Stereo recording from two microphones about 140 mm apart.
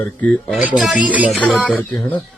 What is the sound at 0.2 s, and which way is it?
Speech, 5° left (ahead or behind).